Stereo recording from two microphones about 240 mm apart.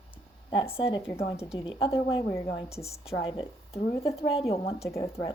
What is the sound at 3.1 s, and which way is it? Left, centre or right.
Speech, left.